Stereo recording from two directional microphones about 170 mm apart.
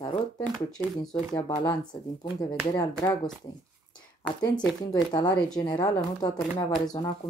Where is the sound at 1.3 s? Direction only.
20° left (ahead or behind).